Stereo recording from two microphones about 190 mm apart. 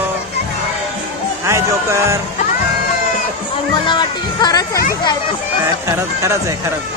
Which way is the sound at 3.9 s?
25° left (ahead or behind).